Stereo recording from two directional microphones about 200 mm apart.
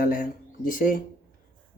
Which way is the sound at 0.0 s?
40° left (ahead or behind).